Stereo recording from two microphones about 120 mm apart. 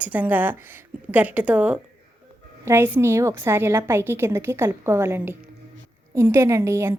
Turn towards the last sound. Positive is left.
turn(degrees=-20)  # may be behind; listen again after turning